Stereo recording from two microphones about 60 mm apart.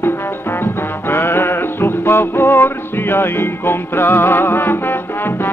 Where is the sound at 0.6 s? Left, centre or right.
Left.